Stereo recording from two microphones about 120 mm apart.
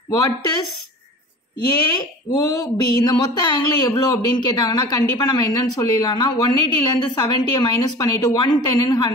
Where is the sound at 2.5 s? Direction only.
30° left (ahead or behind).